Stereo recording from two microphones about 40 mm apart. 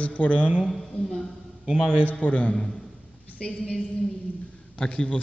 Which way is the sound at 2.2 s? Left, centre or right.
Left.